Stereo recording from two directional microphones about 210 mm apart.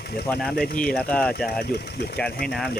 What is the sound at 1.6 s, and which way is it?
Speech, 50° left (ahead or behind).